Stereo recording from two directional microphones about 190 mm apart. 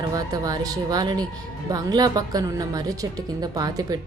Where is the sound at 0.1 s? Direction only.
20° right (ahead or behind).